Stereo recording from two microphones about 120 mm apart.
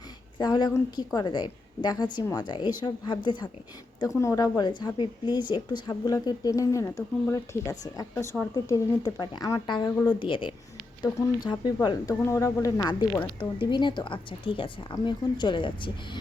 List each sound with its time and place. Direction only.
0.3 s a woman's voice: 35° left (ahead or behind)
4.0 s a woman's voice: 25° left (ahead or behind); by 10.5 s 45° left (ahead or behind)
11.6 s a woman's voice: 35° left (ahead or behind)
12.2 s speech: 25° left (ahead or behind)
13.4 s a woman's voice: 40° left (ahead or behind)